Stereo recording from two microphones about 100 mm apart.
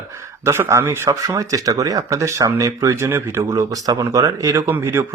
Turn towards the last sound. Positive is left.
turn(degrees=-25)  # may be behind; listen again after turning